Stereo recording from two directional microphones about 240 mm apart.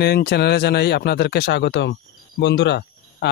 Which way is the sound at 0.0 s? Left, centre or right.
Left.